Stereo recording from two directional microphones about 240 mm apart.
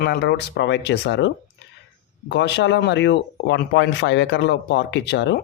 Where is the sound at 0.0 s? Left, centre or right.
Left.